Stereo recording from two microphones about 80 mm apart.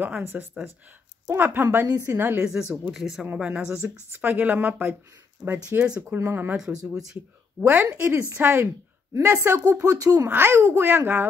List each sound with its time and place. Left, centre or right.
0.0 s a woman's voice: right
1.9 s speech: right
2.1 s speech: right
2.7 s speech: centre
3.3 s speech: centre
3.6 s a woman's voice: right
6.0 s speech: right
7.6 s a woman's voice: right
9.8 s speech: right
10.2 s a woman's voice: right